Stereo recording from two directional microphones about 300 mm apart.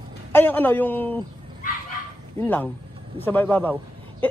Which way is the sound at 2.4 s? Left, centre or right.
Centre.